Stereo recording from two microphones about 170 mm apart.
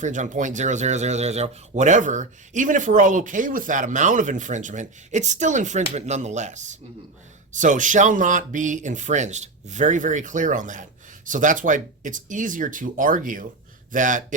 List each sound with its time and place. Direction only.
0.0 s speech: 45° right (ahead or behind)